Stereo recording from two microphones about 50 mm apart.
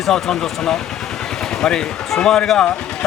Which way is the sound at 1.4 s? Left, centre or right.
Centre.